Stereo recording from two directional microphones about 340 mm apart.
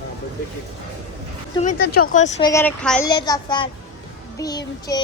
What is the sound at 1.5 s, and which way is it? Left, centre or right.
Speech, left.